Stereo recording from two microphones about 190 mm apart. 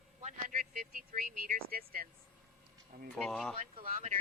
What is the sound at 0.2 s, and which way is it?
Vehicle, 40° right (ahead or behind).